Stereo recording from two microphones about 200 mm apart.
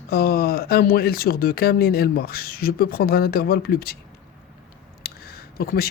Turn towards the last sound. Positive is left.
turn(degrees=50)  # may be behind; listen again after turning